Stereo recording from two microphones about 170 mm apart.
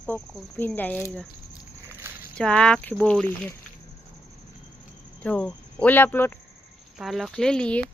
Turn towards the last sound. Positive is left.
turn(degrees=5)  # may be behind; listen again after turning